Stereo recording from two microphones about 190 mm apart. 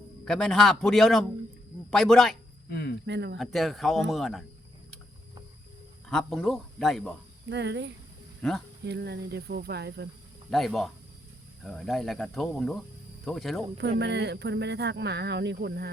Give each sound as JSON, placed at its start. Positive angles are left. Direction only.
{"t": 0.3, "sound": "speech", "side_deg": 0}
{"t": 2.6, "sound": "speech", "side_deg": 55}
{"t": 3.1, "sound": "speech", "side_deg": -60}
{"t": 3.3, "sound": "speech", "side_deg": 0}
{"t": 6.1, "sound": "speech", "side_deg": 0}
{"t": 7.5, "sound": "speech", "side_deg": -65}
{"t": 8.4, "sound": "speech", "side_deg": 5}
{"t": 8.8, "sound": "speech", "side_deg": -60}
{"t": 10.5, "sound": "speech", "side_deg": 0}
{"t": 14.0, "sound": "speech", "side_deg": -65}